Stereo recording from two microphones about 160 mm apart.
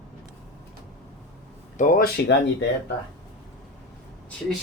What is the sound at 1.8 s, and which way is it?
Speech, 60° left (ahead or behind).